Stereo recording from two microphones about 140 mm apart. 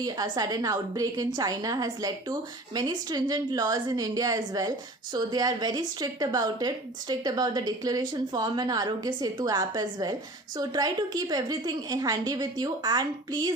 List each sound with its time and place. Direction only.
0.0 s speech: 25° right (ahead or behind)